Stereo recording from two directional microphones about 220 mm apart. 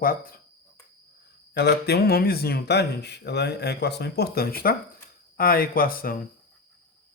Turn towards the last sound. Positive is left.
turn(degrees=40)  # may be behind; listen again after turning